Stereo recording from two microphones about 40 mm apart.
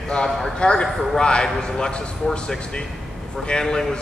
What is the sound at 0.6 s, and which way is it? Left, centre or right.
Speech, left.